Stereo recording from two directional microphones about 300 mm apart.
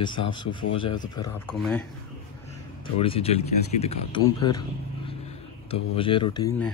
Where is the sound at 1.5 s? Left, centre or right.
Centre.